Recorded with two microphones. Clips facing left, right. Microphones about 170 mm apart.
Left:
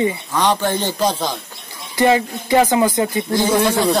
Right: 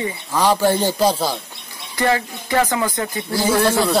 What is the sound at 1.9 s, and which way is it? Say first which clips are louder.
Speech: left 4 dB; 20° left (ahead or behind).